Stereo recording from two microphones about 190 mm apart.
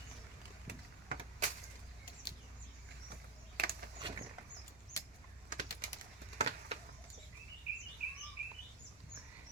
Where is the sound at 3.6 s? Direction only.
55° right (ahead or behind).